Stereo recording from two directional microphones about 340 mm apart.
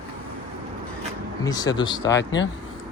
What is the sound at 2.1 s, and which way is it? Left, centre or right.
Speech, left.